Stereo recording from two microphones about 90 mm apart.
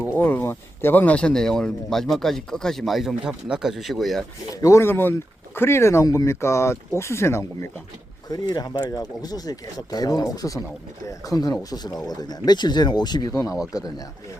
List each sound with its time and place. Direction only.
0.1 s speech: 20° left (ahead or behind); by 4.2 s centre (ahead or behind)
4.5 s speech: 35° left (ahead or behind)
8.3 s speech: 50° left (ahead or behind)
13.3 s speech: 35° left (ahead or behind)